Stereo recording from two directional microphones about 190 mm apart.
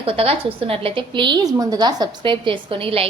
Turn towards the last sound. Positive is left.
turn(degrees=-30)  # may be behind; listen again after turning